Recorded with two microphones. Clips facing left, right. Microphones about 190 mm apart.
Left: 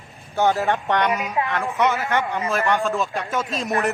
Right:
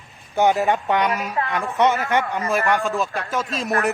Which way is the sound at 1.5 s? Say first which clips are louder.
Right 4 dB; 15° right (ahead or behind).